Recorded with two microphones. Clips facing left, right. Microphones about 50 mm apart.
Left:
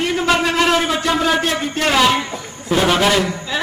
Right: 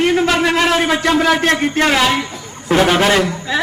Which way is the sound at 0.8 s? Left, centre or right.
Right.